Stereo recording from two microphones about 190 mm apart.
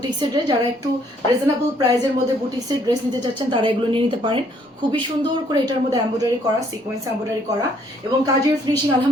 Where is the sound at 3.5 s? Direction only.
25° right (ahead or behind).